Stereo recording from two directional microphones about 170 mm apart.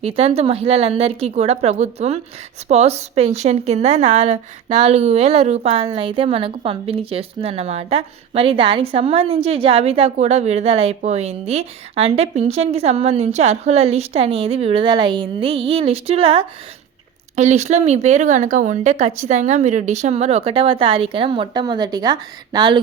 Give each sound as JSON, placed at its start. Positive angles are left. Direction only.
{"t": 0.0, "sound": "speech", "side_deg": -35}